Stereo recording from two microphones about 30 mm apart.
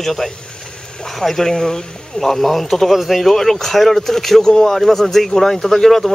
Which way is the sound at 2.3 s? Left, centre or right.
Centre.